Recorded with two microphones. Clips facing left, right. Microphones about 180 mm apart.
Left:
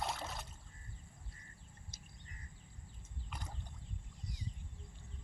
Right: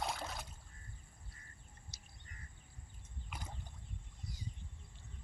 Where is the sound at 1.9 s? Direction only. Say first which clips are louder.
Left 4 dB; 50° left (ahead or behind).